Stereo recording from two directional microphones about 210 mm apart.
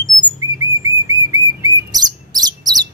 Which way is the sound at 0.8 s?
15° right (ahead or behind).